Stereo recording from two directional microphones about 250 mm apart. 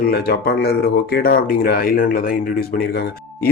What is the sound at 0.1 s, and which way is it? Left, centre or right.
Speech, left.